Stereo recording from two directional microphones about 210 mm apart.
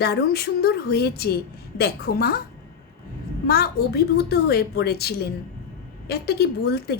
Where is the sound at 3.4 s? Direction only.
45° left (ahead or behind).